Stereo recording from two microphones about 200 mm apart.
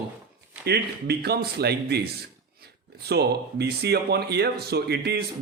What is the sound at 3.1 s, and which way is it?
Speech, 55° right (ahead or behind).